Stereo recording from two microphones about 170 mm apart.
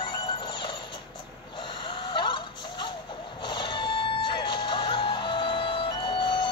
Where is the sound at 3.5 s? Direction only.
25° left (ahead or behind).